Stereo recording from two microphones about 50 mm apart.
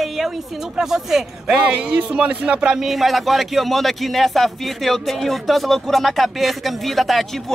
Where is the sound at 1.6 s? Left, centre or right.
Right.